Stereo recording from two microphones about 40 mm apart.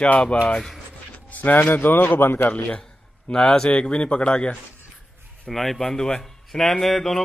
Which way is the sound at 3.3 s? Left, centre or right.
Left.